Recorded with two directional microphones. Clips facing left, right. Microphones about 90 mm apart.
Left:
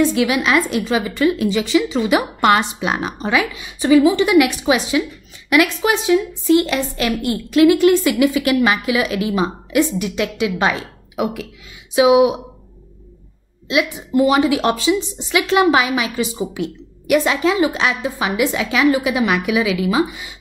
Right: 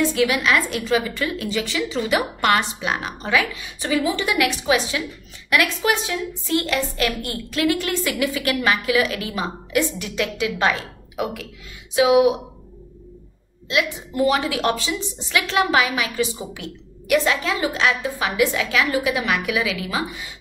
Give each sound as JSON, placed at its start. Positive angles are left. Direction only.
{"t": 0.1, "sound": "a woman's voice", "side_deg": 20}
{"t": 13.7, "sound": "a woman's voice", "side_deg": 15}